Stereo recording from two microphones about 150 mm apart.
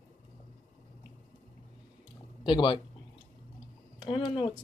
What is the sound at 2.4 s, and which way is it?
Speech, 35° left (ahead or behind).